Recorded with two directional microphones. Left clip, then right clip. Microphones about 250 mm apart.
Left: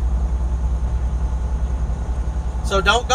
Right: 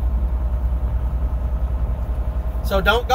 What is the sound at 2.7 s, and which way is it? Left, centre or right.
Speech, right.